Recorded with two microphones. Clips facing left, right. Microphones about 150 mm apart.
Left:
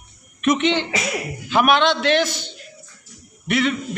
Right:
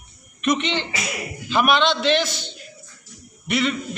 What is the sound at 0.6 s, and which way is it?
Speech, 55° left (ahead or behind).